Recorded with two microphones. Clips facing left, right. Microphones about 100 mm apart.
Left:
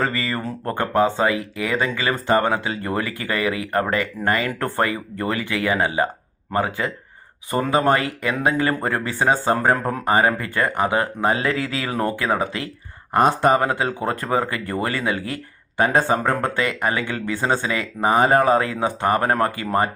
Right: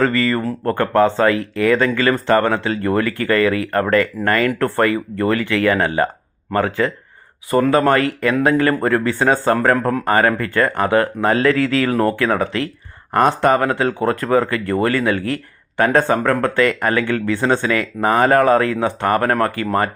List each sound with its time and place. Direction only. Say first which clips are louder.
0.0 s speech: right 7 dB; 20° left (ahead or behind)